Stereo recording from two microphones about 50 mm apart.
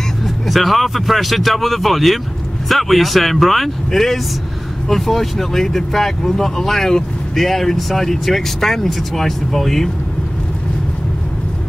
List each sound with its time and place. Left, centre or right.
0.5 s speech: centre